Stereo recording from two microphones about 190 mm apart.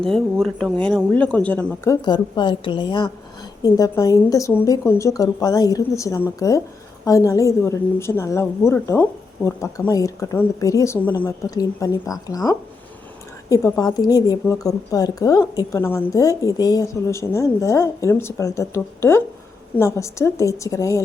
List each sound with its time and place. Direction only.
0.0 s a woman's voice: centre (ahead or behind)